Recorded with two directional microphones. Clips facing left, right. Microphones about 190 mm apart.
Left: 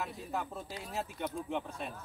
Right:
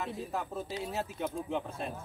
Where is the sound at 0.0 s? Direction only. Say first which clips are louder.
Right 2 dB; centre (ahead or behind).